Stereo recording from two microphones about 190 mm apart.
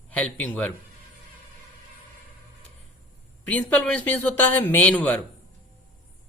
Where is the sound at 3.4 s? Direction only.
5° left (ahead or behind).